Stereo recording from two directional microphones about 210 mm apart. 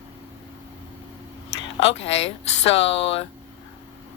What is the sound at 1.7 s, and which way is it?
Speech, 30° left (ahead or behind).